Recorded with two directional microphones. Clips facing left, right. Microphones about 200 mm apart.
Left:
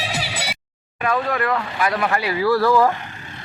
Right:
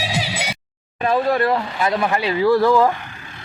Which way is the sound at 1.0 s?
30° right (ahead or behind).